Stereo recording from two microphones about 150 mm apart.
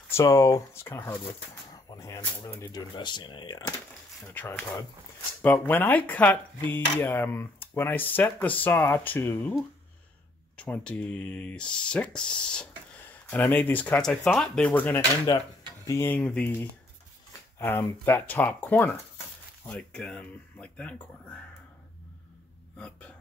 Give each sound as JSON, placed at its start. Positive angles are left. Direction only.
{"t": 0.1, "sound": "speech", "side_deg": 20}
{"t": 4.3, "sound": "speech", "side_deg": 10}
{"t": 22.8, "sound": "speech", "side_deg": 5}